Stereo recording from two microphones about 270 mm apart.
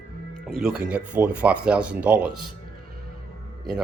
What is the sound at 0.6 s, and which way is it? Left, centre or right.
Speech, centre.